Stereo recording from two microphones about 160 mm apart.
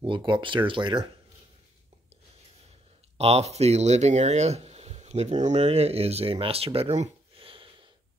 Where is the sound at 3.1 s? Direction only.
40° right (ahead or behind).